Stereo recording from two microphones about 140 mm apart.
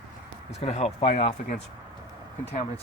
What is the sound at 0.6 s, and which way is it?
Speech, 50° left (ahead or behind).